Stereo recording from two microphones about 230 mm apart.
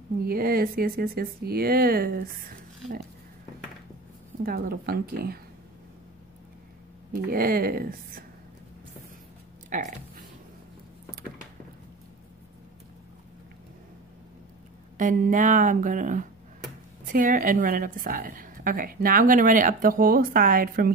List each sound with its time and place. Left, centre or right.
0.2 s a woman's voice: right
4.4 s a woman's voice: right
7.2 s a woman's voice: right
9.7 s music: right
15.0 s a woman's voice: right